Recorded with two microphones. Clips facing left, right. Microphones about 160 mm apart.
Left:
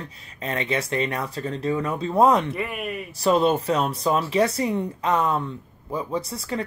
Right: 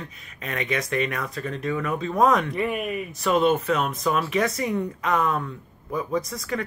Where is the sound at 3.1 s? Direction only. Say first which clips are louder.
Left 1 dB; 35° left (ahead or behind).